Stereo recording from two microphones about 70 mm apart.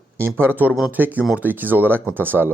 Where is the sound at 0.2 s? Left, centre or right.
Right.